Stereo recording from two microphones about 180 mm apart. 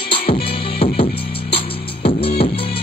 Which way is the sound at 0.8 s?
30° left (ahead or behind).